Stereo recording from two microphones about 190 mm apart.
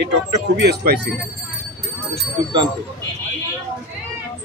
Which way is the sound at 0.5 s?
60° right (ahead or behind).